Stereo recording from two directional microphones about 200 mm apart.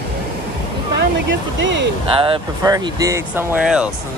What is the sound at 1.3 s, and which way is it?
Speech, 65° right (ahead or behind).